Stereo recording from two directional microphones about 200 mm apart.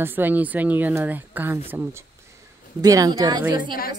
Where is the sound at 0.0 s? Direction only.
10° right (ahead or behind).